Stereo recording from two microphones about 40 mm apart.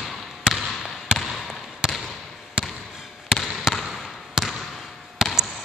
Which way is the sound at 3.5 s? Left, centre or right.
Centre.